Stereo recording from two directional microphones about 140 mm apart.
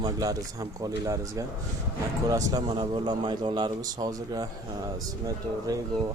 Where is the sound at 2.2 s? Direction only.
25° right (ahead or behind).